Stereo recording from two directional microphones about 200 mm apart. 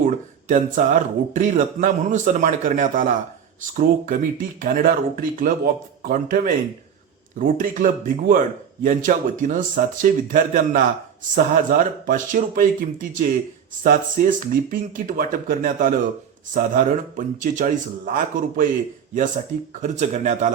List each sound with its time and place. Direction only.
0.0 s a man's voice: 40° right (ahead or behind)
19.8 s a man's voice: 35° right (ahead or behind)